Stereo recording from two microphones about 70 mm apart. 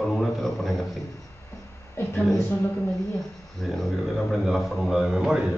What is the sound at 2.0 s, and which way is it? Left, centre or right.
Speech, left.